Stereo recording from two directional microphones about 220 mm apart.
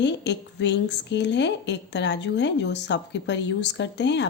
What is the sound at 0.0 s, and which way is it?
A woman's voice, 55° left (ahead or behind).